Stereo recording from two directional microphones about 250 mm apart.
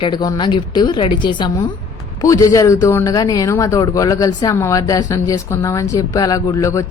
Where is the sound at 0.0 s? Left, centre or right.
Centre.